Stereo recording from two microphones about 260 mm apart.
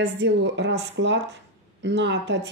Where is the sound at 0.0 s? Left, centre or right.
Right.